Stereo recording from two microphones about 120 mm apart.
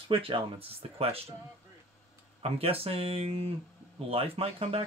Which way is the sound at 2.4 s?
55° right (ahead or behind).